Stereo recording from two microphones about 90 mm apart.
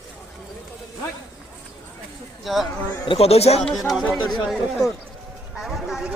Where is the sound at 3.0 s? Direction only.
90° left.